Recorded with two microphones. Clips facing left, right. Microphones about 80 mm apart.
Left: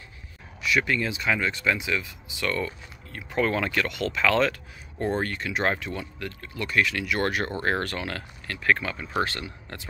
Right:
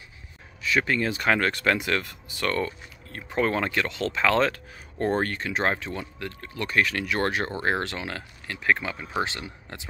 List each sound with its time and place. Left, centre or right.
0.7 s speech: right